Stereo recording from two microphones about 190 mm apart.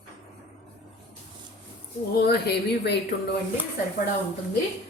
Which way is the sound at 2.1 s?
55° left (ahead or behind).